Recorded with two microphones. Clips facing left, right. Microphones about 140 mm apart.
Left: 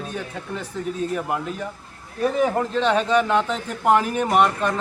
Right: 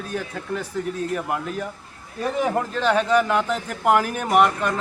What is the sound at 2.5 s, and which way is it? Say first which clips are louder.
A man's voice: left 1 dB; 5° right (ahead or behind).